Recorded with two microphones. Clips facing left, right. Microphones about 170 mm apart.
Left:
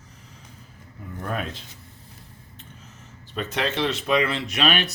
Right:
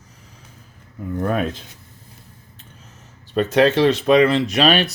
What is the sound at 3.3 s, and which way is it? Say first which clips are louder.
Speech: right 11 dB; 40° right (ahead or behind).